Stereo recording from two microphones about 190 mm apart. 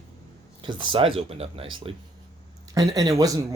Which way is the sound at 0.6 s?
25° right (ahead or behind).